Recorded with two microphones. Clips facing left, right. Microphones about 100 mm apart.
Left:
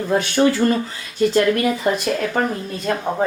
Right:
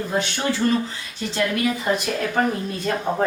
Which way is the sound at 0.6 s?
55° left (ahead or behind).